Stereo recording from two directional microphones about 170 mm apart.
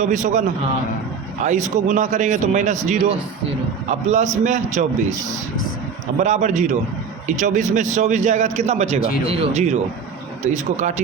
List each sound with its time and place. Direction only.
0.0 s a man's voice: 45° right (ahead or behind)
6.1 s a man's voice: 45° right (ahead or behind)